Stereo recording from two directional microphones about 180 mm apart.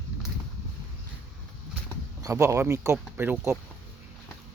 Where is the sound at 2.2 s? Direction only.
15° right (ahead or behind).